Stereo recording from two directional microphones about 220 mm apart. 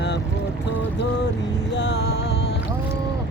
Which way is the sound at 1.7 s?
50° left (ahead or behind).